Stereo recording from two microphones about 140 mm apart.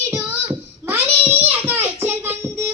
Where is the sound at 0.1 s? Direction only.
15° right (ahead or behind).